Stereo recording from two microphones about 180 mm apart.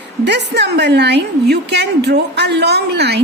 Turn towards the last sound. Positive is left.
turn(degrees=-65)  # may be behind; listen again after turning